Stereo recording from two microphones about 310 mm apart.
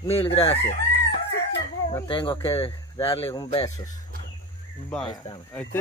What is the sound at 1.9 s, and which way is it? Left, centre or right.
Speech, centre.